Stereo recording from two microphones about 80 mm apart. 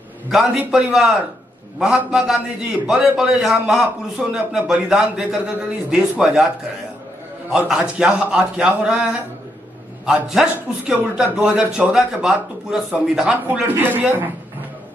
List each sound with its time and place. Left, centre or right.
0.7 s a man's voice: centre
4.2 s a man's voice: centre
4.5 s a man's voice: centre
7.4 s a man's voice: centre
13.7 s a man's voice: right